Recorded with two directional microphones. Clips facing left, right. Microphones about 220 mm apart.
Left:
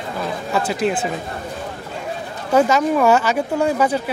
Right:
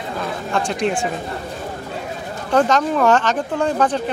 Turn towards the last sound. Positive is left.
turn(degrees=10)  # may be behind; listen again after turning